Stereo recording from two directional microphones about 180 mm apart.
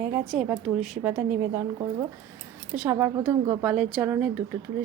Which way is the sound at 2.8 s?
15° right (ahead or behind).